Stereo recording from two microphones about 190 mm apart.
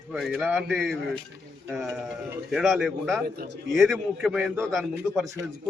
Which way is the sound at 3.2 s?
50° right (ahead or behind).